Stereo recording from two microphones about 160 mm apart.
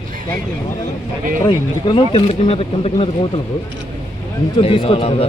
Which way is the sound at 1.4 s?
35° left (ahead or behind).